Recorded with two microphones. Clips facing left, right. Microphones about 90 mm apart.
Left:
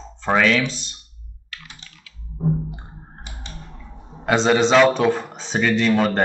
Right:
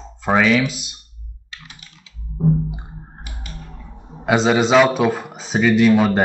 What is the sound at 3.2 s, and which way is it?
Music, 25° left (ahead or behind).